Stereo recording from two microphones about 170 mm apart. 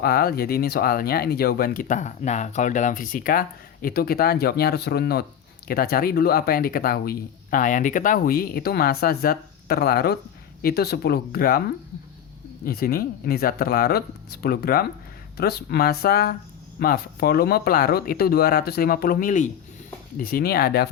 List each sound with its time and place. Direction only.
0.0 s speech: 65° left (ahead or behind)
12.6 s speech: 60° left (ahead or behind)
20.1 s speech: 60° left (ahead or behind)